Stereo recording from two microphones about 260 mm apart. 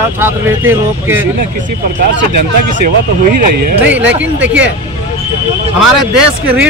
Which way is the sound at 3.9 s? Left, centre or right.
Centre.